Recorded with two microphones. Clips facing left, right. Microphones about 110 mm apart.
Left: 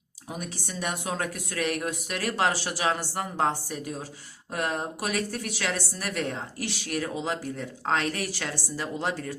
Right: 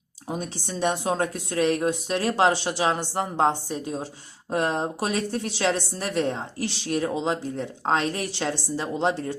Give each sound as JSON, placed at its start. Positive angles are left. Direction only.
{"t": 0.3, "sound": "a woman's voice", "side_deg": -30}